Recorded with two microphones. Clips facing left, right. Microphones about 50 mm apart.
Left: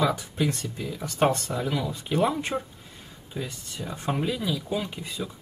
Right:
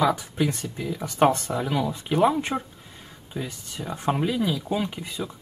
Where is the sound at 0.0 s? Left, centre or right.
Right.